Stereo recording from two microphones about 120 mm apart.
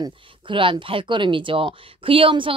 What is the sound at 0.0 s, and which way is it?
A woman's voice, 45° right (ahead or behind).